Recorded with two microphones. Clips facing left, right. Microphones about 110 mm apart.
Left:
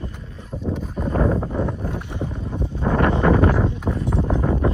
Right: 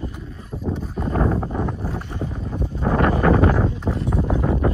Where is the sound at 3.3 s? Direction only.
Centre (ahead or behind).